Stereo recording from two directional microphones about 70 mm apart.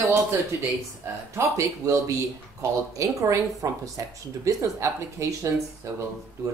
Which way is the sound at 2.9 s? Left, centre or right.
Right.